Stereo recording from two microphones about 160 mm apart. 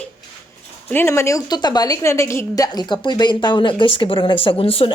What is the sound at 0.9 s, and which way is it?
A woman's voice, 15° left (ahead or behind).